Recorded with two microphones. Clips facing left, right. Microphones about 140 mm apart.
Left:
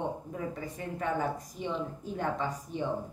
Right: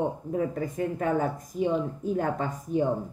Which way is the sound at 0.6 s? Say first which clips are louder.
Right 7 dB; 45° right (ahead or behind).